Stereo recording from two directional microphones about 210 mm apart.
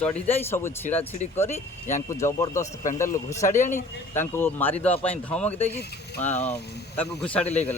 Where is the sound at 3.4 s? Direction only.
35° left (ahead or behind).